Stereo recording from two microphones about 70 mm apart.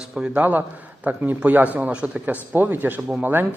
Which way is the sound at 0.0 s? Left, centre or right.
Centre.